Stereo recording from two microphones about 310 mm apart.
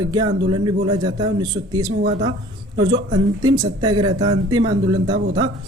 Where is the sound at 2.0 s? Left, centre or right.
Right.